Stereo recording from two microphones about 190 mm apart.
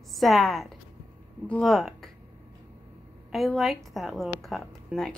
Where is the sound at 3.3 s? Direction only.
Centre (ahead or behind).